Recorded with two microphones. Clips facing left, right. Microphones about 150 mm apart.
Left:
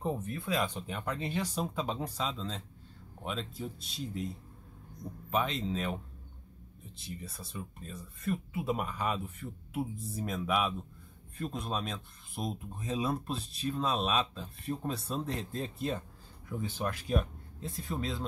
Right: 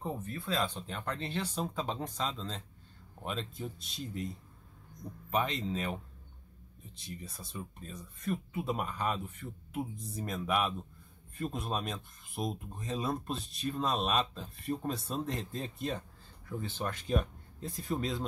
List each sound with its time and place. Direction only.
0.0 s speech: 20° left (ahead or behind)
0.6 s speech: 10° left (ahead or behind)
7.0 s speech: centre (ahead or behind)
16.4 s speech: 10° left (ahead or behind)